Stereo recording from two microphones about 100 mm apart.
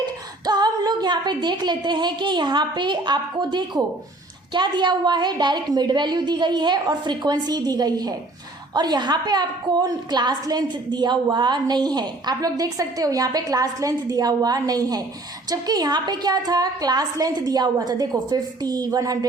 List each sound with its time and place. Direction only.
0.0 s a woman's voice: 45° right (ahead or behind)